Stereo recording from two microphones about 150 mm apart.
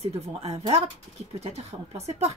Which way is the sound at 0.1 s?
40° right (ahead or behind).